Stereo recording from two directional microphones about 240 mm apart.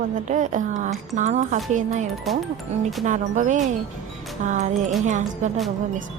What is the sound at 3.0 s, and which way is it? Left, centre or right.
Speech, right.